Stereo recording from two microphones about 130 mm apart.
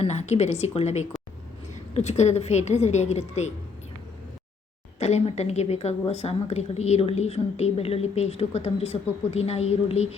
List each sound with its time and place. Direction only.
0.0 s a woman's voice: 60° left (ahead or behind)
4.9 s a woman's voice: 55° left (ahead or behind)